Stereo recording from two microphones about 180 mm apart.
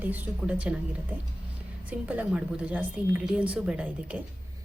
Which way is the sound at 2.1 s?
5° right (ahead or behind).